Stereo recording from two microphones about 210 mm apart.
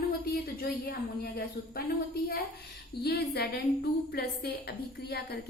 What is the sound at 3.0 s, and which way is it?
A woman's voice, 50° left (ahead or behind).